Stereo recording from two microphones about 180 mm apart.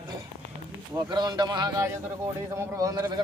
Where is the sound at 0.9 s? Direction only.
20° right (ahead or behind).